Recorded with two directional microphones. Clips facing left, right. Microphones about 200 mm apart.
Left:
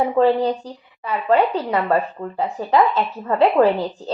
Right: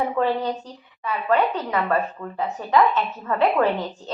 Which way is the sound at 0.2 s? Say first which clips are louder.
Left 6 dB; 30° left (ahead or behind).